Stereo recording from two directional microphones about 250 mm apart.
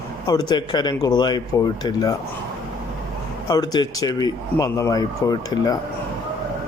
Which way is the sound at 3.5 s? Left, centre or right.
Centre.